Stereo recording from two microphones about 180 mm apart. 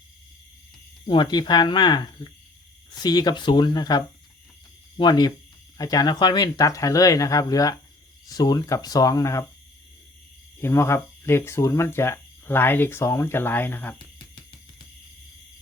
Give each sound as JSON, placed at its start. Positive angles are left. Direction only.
{"t": 1.0, "sound": "speech", "side_deg": 25}
{"t": 10.6, "sound": "speech", "side_deg": 15}